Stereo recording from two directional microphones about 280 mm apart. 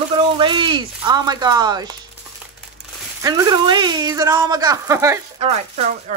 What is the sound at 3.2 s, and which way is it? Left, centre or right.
Speech, centre.